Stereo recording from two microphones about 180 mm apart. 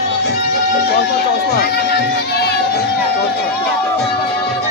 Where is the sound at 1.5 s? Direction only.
60° left (ahead or behind).